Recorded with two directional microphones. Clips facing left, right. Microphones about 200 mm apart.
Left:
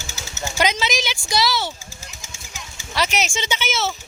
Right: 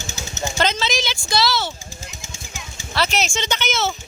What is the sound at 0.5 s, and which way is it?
A woman's voice, 10° left (ahead or behind).